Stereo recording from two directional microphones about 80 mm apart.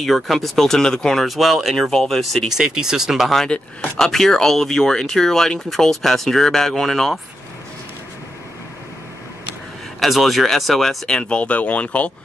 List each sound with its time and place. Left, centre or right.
0.0 s speech: centre
2.5 s speech: centre
3.5 s speech: centre
4.0 s speech: centre
9.9 s speech: centre